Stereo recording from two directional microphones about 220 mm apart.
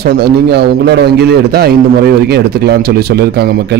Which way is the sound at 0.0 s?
50° right (ahead or behind).